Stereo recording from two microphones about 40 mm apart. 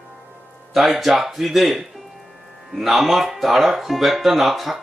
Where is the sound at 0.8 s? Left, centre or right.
Centre.